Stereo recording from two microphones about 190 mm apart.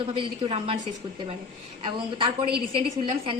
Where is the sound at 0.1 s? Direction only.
30° right (ahead or behind).